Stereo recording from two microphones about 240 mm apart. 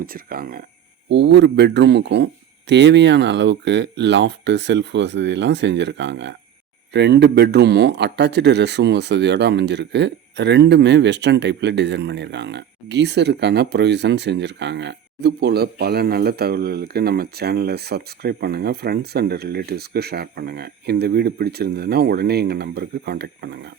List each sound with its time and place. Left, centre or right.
0.0 s a man's voice: right